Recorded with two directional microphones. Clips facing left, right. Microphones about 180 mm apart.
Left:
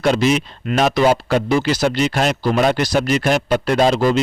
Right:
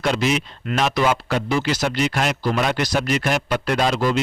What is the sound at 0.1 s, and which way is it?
A man's voice, 35° left (ahead or behind).